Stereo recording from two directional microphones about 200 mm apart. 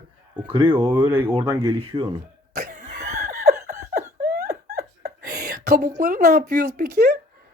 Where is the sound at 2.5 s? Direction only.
40° right (ahead or behind).